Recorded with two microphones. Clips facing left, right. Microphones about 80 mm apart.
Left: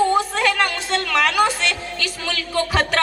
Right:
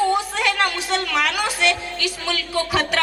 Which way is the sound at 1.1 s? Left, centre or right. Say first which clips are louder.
Left 4 dB; left.